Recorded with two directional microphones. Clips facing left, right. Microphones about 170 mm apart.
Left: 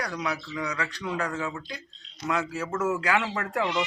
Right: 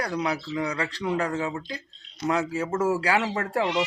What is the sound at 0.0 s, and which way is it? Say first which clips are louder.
Speech: right 4 dB; 30° right (ahead or behind).